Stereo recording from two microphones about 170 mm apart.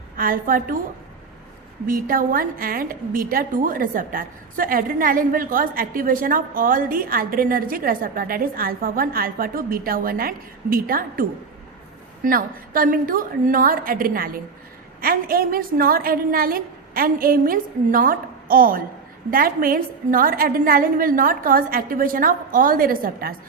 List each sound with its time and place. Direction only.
0.2 s a woman's voice: 55° right (ahead or behind)
1.9 s a woman's voice: 55° right (ahead or behind)